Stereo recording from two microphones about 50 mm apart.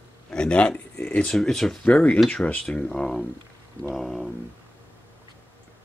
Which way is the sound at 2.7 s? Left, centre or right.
Centre.